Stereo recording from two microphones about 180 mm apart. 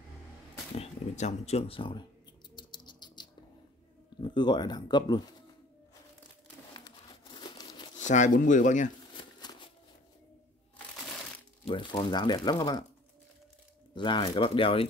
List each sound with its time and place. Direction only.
0.7 s speech: 40° left (ahead or behind)
2.5 s bird: 25° left (ahead or behind)
4.2 s speech: 25° left (ahead or behind)
7.3 s crumpling: 25° left (ahead or behind)
8.0 s speech: 40° left (ahead or behind)
9.1 s a sound: 25° left (ahead or behind)
11.6 s speech: 25° left (ahead or behind)
13.9 s speech: 25° left (ahead or behind)